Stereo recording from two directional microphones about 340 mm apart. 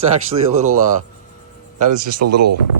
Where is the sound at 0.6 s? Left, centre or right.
Right.